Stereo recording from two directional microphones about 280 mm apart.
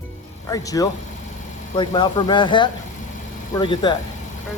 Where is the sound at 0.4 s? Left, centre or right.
Centre.